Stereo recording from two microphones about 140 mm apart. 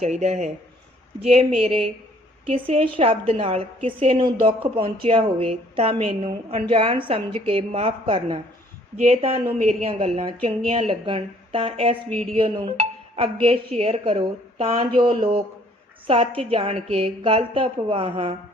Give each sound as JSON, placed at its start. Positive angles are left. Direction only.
{"t": 0.0, "sound": "a woman's voice", "side_deg": -55}